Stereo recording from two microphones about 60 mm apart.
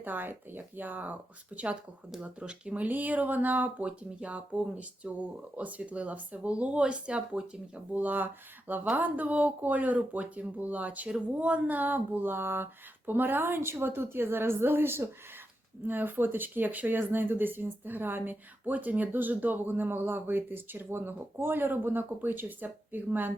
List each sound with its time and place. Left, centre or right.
0.0 s speech: right; by 7.6 s centre
7.9 s speech: right